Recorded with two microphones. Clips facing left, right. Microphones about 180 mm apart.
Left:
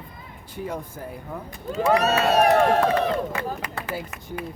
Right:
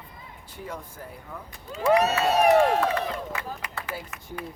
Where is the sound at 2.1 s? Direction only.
75° left (ahead or behind).